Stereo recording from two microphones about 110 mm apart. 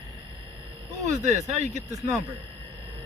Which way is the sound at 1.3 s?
90° right.